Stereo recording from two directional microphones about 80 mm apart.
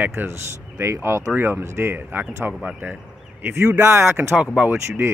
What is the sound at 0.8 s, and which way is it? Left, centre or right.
Speech, right.